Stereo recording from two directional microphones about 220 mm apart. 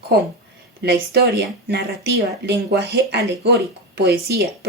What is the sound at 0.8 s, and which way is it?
Speech, 45° right (ahead or behind).